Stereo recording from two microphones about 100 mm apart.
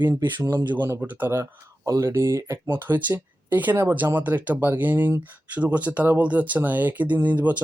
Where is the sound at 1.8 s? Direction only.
35° right (ahead or behind).